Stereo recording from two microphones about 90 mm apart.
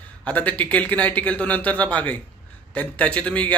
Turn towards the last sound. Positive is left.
turn(degrees=15)  # may be behind; listen again after turning